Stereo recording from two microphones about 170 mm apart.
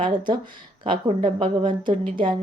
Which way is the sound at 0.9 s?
30° right (ahead or behind).